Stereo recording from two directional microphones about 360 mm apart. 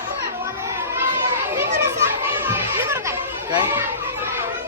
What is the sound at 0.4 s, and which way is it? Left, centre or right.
Children playing, centre.